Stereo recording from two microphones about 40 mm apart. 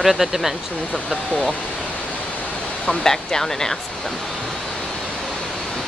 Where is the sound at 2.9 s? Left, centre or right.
Centre.